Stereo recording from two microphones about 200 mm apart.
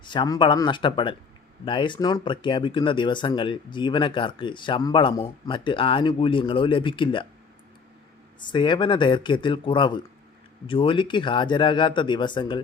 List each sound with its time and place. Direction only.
0.0 s speech: 25° left (ahead or behind)
8.4 s speech: 25° left (ahead or behind)